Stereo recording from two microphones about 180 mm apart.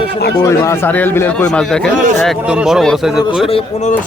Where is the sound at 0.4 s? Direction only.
15° left (ahead or behind); by 3.2 s centre (ahead or behind).